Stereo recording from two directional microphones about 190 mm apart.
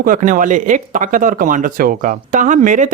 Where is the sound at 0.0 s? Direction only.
45° right (ahead or behind).